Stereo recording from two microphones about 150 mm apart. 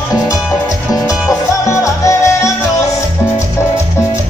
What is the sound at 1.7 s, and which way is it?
Music, 20° left (ahead or behind).